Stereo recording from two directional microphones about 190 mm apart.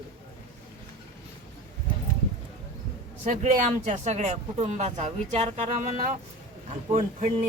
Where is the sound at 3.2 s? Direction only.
40° right (ahead or behind).